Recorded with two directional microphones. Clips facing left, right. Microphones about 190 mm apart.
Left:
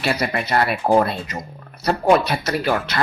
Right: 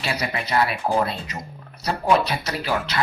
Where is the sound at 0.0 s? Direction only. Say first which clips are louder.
Left 5 dB; 55° left (ahead or behind).